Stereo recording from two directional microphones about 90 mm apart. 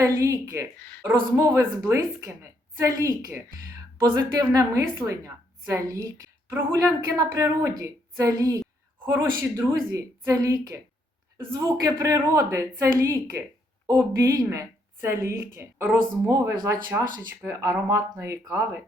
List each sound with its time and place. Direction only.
0.0 s a woman's voice: 35° right (ahead or behind)
0.8 s speech: 15° left (ahead or behind)
1.5 s a woman's voice: 35° right (ahead or behind)
9.0 s speech: 25° right (ahead or behind)
9.9 s a woman's voice: 40° right (ahead or behind)
16.3 s a woman's voice: 40° right (ahead or behind)